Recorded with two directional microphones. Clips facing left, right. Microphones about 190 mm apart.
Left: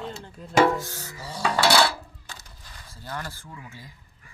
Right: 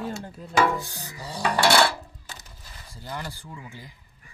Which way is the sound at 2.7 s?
15° right (ahead or behind).